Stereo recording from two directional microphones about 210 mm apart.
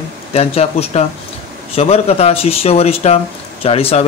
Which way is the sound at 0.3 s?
30° left (ahead or behind).